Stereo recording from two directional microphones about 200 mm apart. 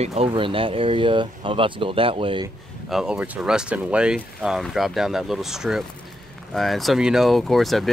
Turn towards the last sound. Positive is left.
turn(degrees=0)  # may be behind; listen again after turning